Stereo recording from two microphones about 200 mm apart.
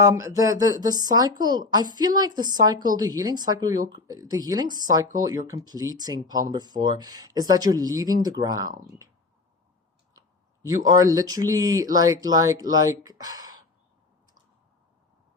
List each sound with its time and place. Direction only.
0.0 s speech: 15° right (ahead or behind)
10.7 s speech: 20° right (ahead or behind)